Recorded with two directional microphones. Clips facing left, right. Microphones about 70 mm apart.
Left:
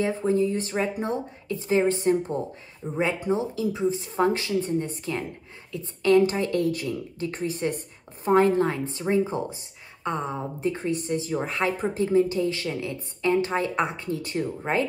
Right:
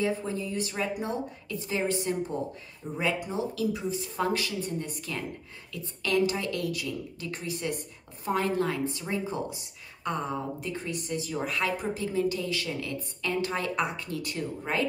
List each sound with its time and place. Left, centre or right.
0.0 s speech: left